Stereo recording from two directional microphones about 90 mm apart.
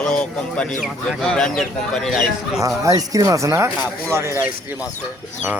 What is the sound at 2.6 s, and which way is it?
Speech, 40° right (ahead or behind).